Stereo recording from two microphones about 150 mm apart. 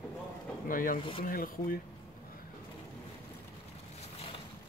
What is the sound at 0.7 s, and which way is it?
Speech, 65° left (ahead or behind).